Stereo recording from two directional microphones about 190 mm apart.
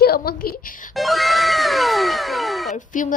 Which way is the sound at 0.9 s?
Centre (ahead or behind).